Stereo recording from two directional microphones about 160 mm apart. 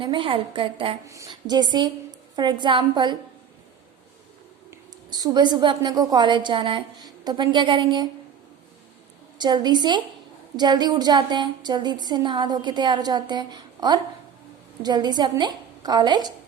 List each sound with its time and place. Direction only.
0.0 s a woman's voice: 30° right (ahead or behind)
1.0 s a woman's voice: 20° right (ahead or behind)
4.7 s a woman's voice: 25° right (ahead or behind)
9.4 s a woman's voice: 25° right (ahead or behind)